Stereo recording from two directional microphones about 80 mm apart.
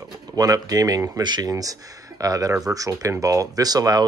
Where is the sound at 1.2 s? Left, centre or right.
Right.